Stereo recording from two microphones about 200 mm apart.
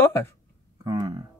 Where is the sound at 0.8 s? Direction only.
20° right (ahead or behind).